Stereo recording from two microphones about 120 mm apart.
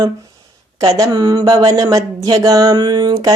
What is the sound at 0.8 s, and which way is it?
Speech, 30° right (ahead or behind).